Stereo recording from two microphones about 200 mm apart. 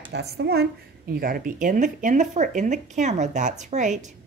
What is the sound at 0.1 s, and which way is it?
A woman's voice, 55° right (ahead or behind).